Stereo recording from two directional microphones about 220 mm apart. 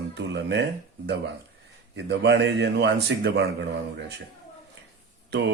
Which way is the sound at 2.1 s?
50° right (ahead or behind).